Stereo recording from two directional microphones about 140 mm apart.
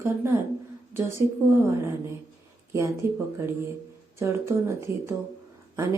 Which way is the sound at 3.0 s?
20° right (ahead or behind).